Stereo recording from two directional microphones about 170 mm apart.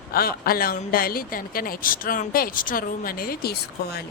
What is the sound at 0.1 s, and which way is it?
Speech, 60° left (ahead or behind).